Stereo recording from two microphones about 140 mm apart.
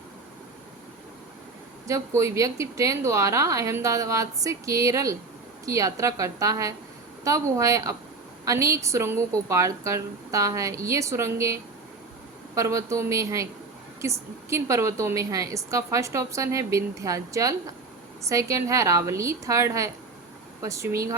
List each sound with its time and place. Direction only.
1.9 s a woman's voice: 20° right (ahead or behind)
12.5 s a woman's voice: 20° right (ahead or behind)